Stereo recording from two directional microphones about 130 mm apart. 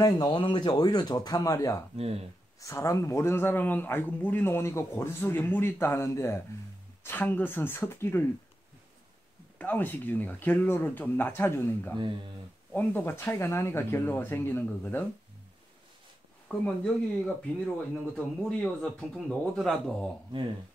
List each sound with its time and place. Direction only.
0.0 s speech: 35° left (ahead or behind)
2.0 s speech: 50° right (ahead or behind)
2.6 s speech: 25° left (ahead or behind)
9.6 s speech: 15° left (ahead or behind)
16.4 s a man's voice: 5° left (ahead or behind)
18.1 s a man's voice: 5° left (ahead or behind)